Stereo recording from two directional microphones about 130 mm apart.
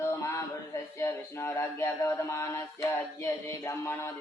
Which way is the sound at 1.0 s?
20° left (ahead or behind).